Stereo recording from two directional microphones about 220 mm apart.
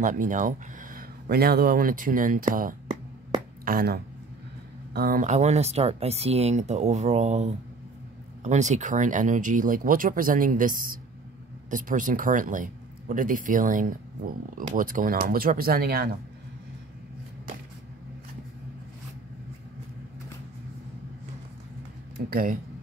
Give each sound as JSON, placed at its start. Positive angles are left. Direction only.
{"t": 0.0, "sound": "speech", "side_deg": -35}
{"t": 22.3, "sound": "speech", "side_deg": -40}